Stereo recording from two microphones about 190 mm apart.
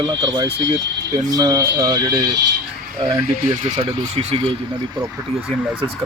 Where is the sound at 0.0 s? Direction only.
25° right (ahead or behind).